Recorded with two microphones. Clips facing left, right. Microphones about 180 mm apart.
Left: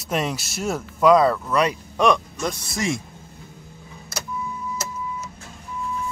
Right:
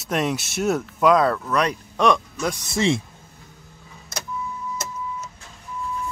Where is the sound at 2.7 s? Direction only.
30° right (ahead or behind).